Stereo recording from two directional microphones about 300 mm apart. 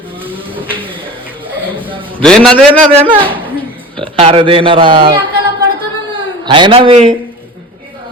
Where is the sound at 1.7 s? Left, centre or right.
Centre.